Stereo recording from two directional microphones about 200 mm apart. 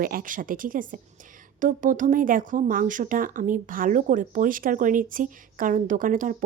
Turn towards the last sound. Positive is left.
turn(degrees=-40)  # may be behind; listen again after turning